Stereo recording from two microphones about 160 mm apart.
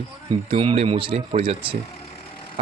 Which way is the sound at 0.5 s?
35° right (ahead or behind).